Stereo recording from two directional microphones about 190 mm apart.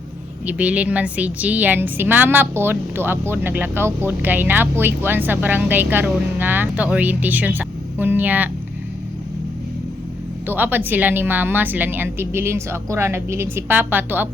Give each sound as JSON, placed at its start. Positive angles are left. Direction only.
{"t": 0.4, "sound": "speech", "side_deg": -5}
{"t": 10.4, "sound": "speech", "side_deg": -10}